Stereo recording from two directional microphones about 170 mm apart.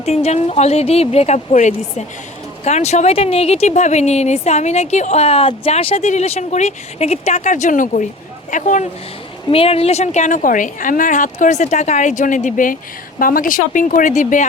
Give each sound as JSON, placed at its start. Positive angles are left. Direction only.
{"t": 0.0, "sound": "a woman's voice", "side_deg": 40}
{"t": 9.5, "sound": "a woman's voice", "side_deg": 35}